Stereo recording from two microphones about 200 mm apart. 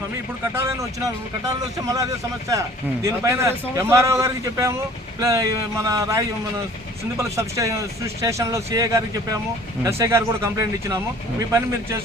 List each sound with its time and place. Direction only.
0.5 s a man's voice: 15° right (ahead or behind)